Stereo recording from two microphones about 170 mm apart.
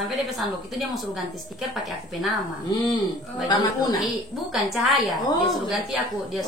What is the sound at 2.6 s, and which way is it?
A woman's voice, 25° left (ahead or behind).